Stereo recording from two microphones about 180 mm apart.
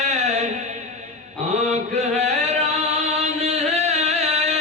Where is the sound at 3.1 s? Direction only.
40° right (ahead or behind).